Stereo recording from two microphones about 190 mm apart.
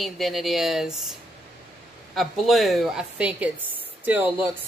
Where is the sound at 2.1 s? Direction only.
Centre (ahead or behind).